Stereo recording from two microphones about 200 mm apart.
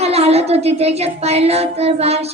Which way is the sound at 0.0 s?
30° right (ahead or behind).